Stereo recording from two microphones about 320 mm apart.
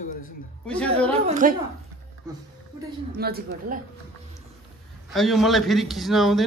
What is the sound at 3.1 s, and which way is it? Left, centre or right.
Speech, right.